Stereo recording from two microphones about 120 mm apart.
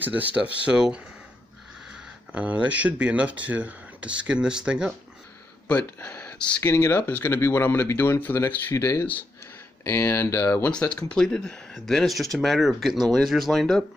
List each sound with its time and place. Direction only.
0.0 s speech: 15° right (ahead or behind)
5.7 s speech: 10° left (ahead or behind)
6.6 s speech: 20° left (ahead or behind)
10.5 s speech: 10° left (ahead or behind)